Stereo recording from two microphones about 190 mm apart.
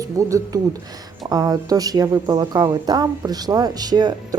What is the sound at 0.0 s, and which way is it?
Speech, 15° right (ahead or behind).